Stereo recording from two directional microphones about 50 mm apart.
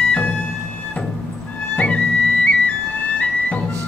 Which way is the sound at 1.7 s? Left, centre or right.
Left.